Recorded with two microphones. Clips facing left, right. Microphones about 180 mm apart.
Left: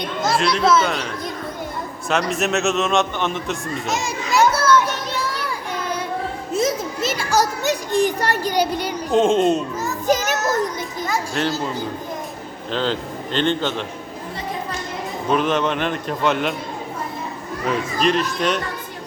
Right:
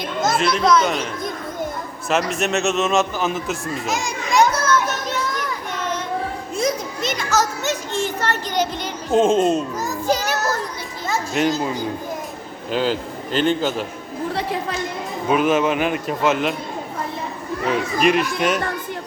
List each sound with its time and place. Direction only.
0.3 s speech: centre (ahead or behind)
2.0 s a man's voice: centre (ahead or behind)
6.5 s children playing: centre (ahead or behind)
9.1 s speech: centre (ahead or behind)
10.1 s music: 20° left (ahead or behind)
11.1 s a man's voice: 15° right (ahead or behind)
15.3 s a man's voice: 5° right (ahead or behind)
17.7 s a man's voice: 10° right (ahead or behind)